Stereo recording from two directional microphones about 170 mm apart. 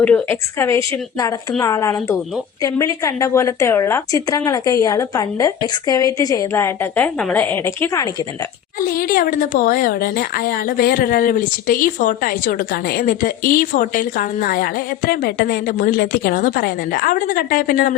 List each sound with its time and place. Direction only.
0.0 s a woman's voice: 10° left (ahead or behind)
8.9 s a woman's voice: 60° left (ahead or behind)